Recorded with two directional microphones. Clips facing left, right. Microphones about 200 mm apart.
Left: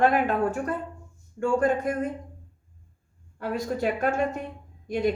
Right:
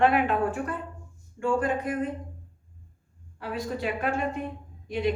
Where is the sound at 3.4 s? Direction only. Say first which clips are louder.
Left 4 dB; 45° left (ahead or behind).